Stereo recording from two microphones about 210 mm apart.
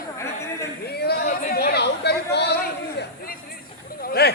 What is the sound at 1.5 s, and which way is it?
Chatter, 50° left (ahead or behind).